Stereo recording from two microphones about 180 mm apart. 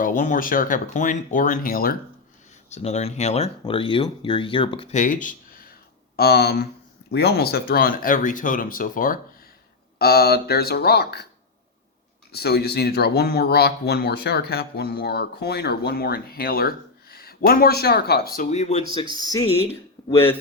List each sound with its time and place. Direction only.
0.0 s speech: 45° left (ahead or behind)
2.7 s speech: 35° left (ahead or behind)
4.9 s speech: 45° left (ahead or behind)
6.1 s speech: 60° left (ahead or behind)
10.0 s speech: 60° left (ahead or behind)
12.3 s speech: 60° left (ahead or behind)
18.3 s speech: 40° left (ahead or behind)
18.9 s speech: 25° left (ahead or behind)
20.0 s a sound: 20° left (ahead or behind)